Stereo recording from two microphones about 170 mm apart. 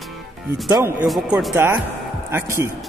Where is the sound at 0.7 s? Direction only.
15° right (ahead or behind).